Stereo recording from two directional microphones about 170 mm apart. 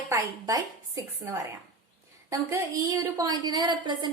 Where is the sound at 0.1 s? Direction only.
20° right (ahead or behind).